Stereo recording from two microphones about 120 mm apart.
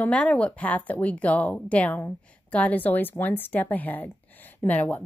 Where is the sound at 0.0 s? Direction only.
10° left (ahead or behind).